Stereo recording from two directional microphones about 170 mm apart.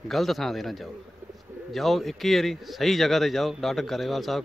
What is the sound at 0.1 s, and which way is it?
Speech, centre (ahead or behind).